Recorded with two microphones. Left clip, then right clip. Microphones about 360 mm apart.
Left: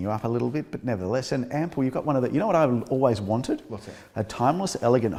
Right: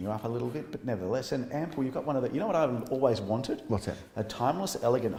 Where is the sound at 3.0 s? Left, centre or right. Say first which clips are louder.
Left 3 dB; left.